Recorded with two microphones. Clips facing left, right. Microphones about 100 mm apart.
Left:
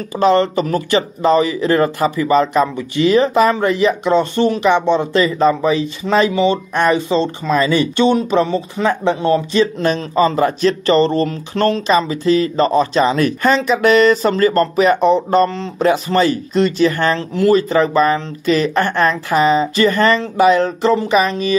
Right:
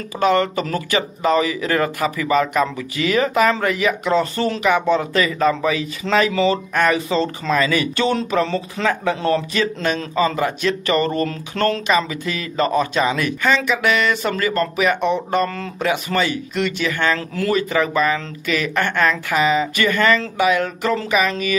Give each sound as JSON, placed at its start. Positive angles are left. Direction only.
{"t": 0.2, "sound": "speech", "side_deg": 30}
{"t": 12.1, "sound": "speech", "side_deg": 30}
{"t": 15.8, "sound": "speech", "side_deg": 35}